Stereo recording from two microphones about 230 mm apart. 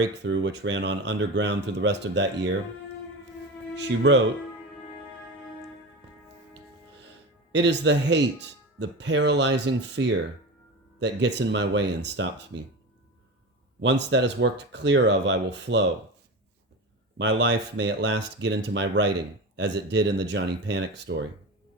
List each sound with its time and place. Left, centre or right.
0.0 s speech: right
4.1 s speech: right
7.5 s speech: right
13.8 s speech: right
17.2 s speech: right